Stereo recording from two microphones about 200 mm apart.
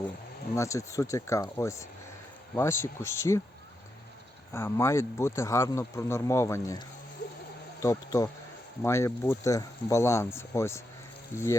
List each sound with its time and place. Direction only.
0.5 s speech: 15° left (ahead or behind)
4.5 s speech: 15° left (ahead or behind)